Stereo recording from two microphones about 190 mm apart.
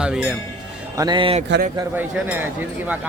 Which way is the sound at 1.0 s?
25° right (ahead or behind).